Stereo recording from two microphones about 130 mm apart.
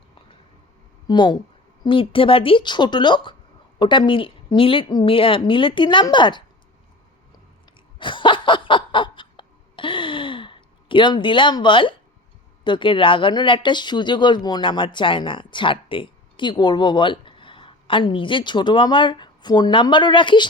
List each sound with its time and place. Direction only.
1.0 s speech: 35° left (ahead or behind)
7.9 s a sound: 40° left (ahead or behind)
12.6 s speech: 40° left (ahead or behind)